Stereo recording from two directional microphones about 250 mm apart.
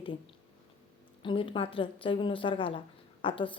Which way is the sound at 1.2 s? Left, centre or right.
Left.